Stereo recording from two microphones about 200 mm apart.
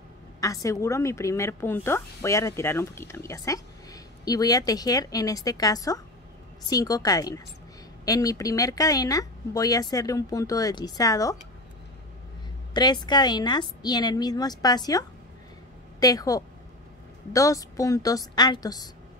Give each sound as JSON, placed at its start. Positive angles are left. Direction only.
{"t": 0.4, "sound": "a woman's voice", "side_deg": 15}
{"t": 12.7, "sound": "a woman's voice", "side_deg": 20}